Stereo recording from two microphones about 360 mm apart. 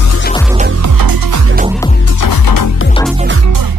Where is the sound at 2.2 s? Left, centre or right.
Left.